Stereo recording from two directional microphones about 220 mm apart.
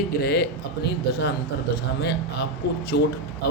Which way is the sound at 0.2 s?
50° left (ahead or behind).